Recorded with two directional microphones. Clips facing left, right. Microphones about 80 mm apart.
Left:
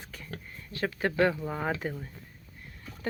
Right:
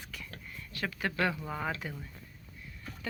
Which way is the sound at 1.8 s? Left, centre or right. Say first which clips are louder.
Left 7 dB; left.